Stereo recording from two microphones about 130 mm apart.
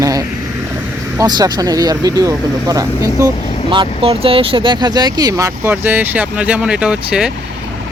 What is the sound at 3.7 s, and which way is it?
Speech, 45° right (ahead or behind).